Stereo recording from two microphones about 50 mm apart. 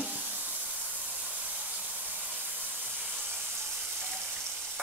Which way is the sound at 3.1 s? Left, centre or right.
Centre.